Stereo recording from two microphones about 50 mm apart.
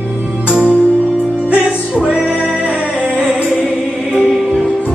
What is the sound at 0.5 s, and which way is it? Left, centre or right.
Music, right.